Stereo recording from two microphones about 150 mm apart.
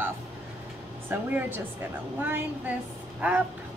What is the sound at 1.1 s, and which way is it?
A woman's voice, 15° right (ahead or behind).